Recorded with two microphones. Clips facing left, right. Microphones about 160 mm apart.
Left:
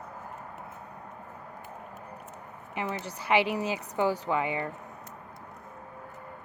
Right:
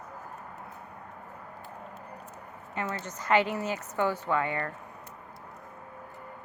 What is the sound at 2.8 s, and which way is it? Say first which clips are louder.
Speech: left 1 dB; 15° left (ahead or behind).